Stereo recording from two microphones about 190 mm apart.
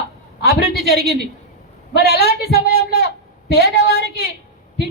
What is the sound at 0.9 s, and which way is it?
Speech, 55° right (ahead or behind).